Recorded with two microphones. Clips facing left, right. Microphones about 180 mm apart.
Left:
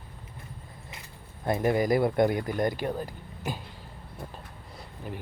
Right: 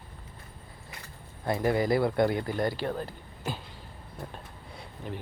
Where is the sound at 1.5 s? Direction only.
20° left (ahead or behind).